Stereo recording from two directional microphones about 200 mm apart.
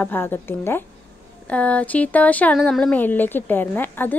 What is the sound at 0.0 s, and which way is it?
A woman's voice, 10° left (ahead or behind).